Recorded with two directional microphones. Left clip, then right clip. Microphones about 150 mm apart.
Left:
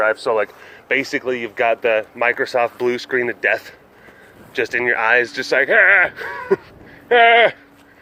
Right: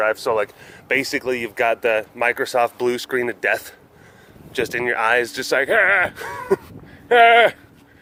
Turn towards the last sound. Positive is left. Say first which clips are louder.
# even
turn(degrees=-45)  # may be behind; listen again after turning